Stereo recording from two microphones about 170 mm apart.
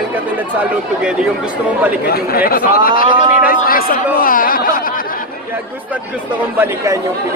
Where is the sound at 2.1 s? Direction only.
60° left (ahead or behind).